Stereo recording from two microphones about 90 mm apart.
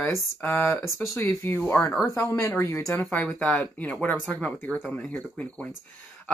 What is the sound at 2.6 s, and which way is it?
Speech, 35° left (ahead or behind).